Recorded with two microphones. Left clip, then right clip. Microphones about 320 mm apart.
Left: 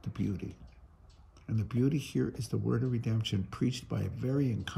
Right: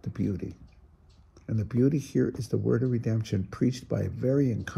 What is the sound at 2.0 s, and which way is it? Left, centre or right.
Speech, centre.